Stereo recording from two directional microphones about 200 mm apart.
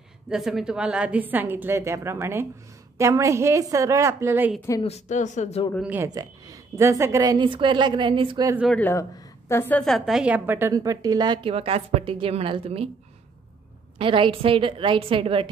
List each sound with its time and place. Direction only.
0.3 s a woman's voice: centre (ahead or behind)
4.8 s speech: 35° left (ahead or behind)
5.8 s a woman's voice: 10° right (ahead or behind)
6.0 s a woman's voice: 20° right (ahead or behind)
8.5 s a woman's voice: 5° left (ahead or behind); by 12.9 s 30° right (ahead or behind)
13.9 s a woman's voice: 25° right (ahead or behind)